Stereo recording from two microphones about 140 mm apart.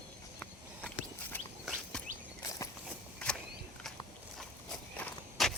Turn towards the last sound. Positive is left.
turn(degrees=5)  # may be behind; listen again after turning